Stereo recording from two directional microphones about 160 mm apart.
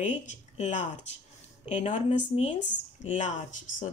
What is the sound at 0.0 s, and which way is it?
Speech, 50° left (ahead or behind).